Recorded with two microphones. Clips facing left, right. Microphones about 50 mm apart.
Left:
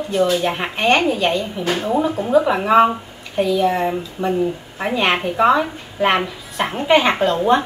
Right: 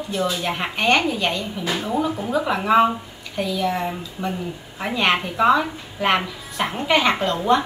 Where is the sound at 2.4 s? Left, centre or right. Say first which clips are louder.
Left 3 dB; centre.